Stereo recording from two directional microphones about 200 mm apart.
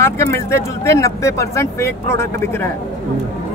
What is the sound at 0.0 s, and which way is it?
Speech, 10° left (ahead or behind).